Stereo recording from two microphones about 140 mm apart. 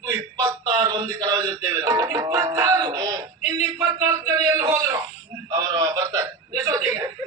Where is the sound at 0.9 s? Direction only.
25° right (ahead or behind).